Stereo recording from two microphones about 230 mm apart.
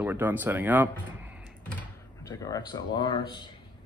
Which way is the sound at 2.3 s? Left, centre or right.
Centre.